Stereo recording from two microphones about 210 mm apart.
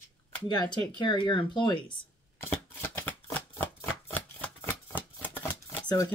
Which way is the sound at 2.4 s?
10° left (ahead or behind).